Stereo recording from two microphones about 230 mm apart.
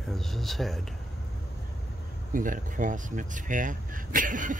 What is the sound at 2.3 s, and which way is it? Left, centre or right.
Speech, right.